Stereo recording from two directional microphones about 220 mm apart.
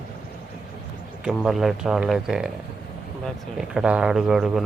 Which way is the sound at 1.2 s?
Centre (ahead or behind).